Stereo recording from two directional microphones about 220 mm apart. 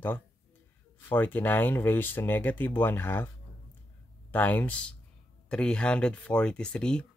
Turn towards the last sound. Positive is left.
turn(degrees=5)  # may be behind; listen again after turning